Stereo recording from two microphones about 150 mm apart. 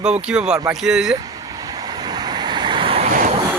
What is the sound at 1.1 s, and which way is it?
Vehicle, 25° right (ahead or behind).